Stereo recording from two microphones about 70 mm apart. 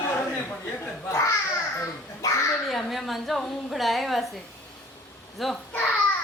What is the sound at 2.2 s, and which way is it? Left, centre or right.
Babbling, left.